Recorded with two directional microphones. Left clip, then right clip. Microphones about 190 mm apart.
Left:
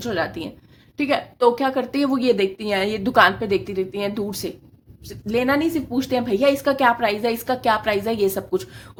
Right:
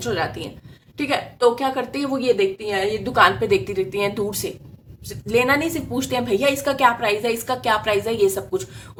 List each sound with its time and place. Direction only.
0.0 s a woman's voice: 45° left (ahead or behind)